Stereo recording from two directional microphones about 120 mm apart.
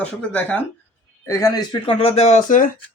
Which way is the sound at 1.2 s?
30° left (ahead or behind).